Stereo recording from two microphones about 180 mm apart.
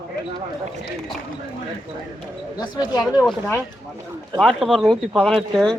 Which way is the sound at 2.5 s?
20° left (ahead or behind).